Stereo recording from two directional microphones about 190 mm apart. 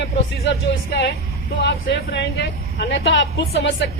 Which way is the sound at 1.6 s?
65° left (ahead or behind).